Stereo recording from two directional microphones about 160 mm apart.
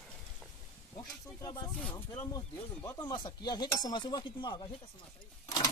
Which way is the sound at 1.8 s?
5° left (ahead or behind).